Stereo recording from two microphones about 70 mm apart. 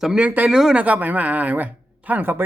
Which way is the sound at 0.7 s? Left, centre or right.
Right.